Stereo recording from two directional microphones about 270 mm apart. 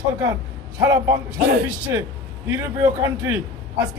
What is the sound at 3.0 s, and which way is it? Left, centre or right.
Speech, centre.